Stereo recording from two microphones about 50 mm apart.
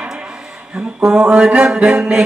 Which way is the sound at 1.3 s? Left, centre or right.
Right.